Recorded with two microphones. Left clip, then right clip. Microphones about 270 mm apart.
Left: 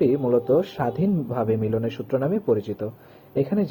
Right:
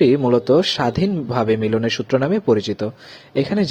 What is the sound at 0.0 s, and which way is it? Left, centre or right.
Speech, right.